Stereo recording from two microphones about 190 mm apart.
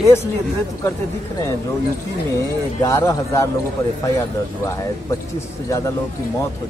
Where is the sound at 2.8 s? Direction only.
15° left (ahead or behind).